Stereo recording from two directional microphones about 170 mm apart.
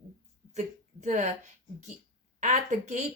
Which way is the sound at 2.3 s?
45° right (ahead or behind).